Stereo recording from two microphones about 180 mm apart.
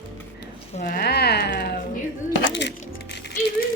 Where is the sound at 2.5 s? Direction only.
75° left (ahead or behind).